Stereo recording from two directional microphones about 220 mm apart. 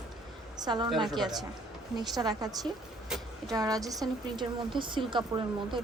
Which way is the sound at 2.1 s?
15° right (ahead or behind).